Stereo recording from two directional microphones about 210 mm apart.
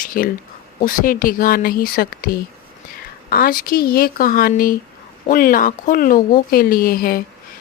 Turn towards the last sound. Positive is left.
turn(degrees=45)  # may be behind; listen again after turning